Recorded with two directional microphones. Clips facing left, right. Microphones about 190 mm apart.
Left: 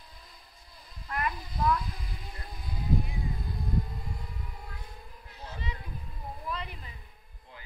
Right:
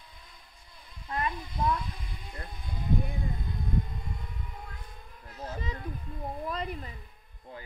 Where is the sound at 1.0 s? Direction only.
25° right (ahead or behind).